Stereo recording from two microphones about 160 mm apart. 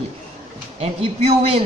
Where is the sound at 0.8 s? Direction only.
40° right (ahead or behind).